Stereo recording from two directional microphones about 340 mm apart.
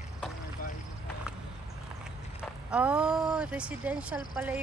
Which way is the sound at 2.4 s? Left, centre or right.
Centre.